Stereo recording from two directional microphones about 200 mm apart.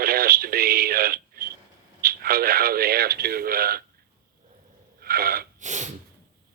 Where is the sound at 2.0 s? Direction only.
50° right (ahead or behind).